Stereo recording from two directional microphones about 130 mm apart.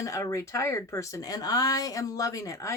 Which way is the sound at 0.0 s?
25° left (ahead or behind).